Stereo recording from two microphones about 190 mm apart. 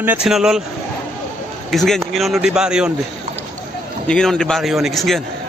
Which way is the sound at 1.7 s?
Centre (ahead or behind).